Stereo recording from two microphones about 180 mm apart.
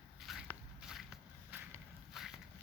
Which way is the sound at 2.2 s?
5° right (ahead or behind).